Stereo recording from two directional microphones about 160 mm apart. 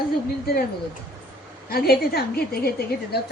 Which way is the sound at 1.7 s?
75° left (ahead or behind).